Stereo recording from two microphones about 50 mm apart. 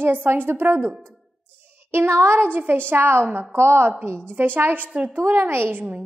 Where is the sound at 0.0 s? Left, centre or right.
Right.